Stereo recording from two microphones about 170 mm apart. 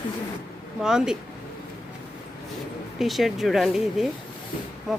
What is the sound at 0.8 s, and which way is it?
Speech, 5° right (ahead or behind).